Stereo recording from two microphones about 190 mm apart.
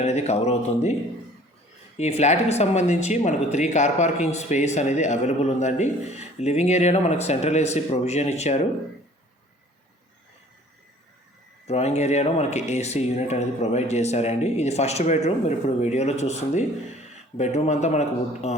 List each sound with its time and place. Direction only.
0.0 s speech: 35° left (ahead or behind)
2.0 s speech: 35° left (ahead or behind)
11.6 s speech: 35° left (ahead or behind)